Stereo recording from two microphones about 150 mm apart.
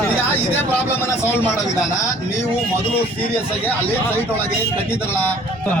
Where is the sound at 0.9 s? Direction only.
15° left (ahead or behind).